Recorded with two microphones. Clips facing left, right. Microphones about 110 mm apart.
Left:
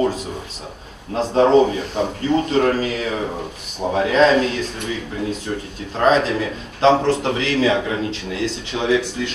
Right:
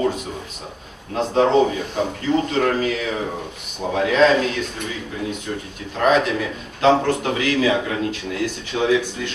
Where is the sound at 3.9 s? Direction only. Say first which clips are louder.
Left 1 dB; 30° left (ahead or behind).